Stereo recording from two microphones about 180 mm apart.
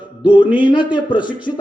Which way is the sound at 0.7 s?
25° left (ahead or behind).